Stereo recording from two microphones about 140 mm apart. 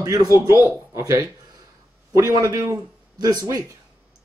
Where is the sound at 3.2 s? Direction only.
30° right (ahead or behind).